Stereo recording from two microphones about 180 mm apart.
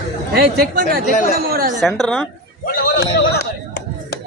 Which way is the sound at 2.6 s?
55° left (ahead or behind).